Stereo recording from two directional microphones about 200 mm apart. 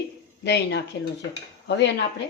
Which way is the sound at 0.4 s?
60° left (ahead or behind).